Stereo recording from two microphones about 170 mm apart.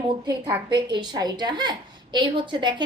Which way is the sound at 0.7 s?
25° right (ahead or behind).